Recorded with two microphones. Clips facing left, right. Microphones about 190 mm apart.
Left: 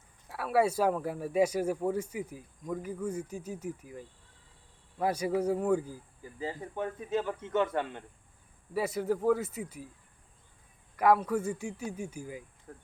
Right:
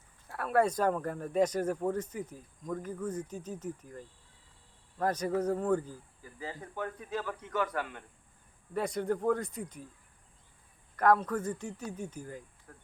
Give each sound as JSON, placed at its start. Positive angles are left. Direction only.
{"t": 0.3, "sound": "speech", "side_deg": 5}
{"t": 6.4, "sound": "a man's voice", "side_deg": 20}
{"t": 8.7, "sound": "speech", "side_deg": 5}
{"t": 10.9, "sound": "speech", "side_deg": 10}
{"t": 12.7, "sound": "a man's voice", "side_deg": 25}